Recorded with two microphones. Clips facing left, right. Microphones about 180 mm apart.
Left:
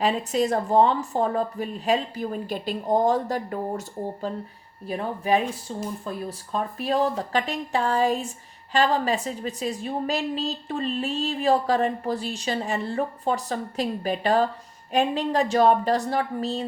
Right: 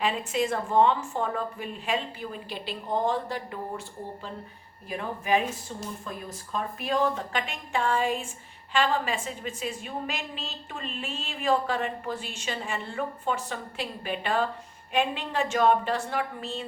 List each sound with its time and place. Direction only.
0.0 s a woman's voice: 40° left (ahead or behind)